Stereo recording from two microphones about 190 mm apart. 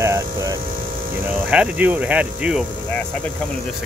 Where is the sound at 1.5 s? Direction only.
5° right (ahead or behind).